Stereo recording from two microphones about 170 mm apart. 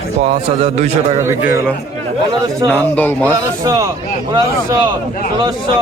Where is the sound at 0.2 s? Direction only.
40° right (ahead or behind).